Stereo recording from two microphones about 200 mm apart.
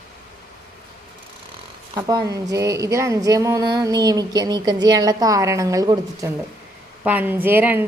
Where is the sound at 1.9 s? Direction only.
20° right (ahead or behind).